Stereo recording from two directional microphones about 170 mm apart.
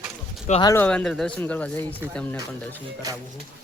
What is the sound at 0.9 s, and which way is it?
Speech, 5° left (ahead or behind).